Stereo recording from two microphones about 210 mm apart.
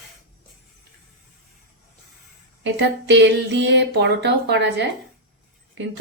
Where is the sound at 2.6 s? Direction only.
60° right (ahead or behind).